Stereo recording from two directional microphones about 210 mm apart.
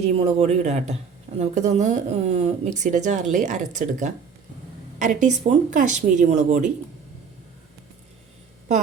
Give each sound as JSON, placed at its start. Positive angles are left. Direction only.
{"t": 0.0, "sound": "a woman's voice", "side_deg": -30}